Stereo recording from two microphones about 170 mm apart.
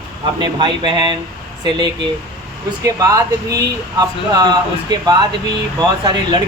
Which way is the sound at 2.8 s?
20° right (ahead or behind).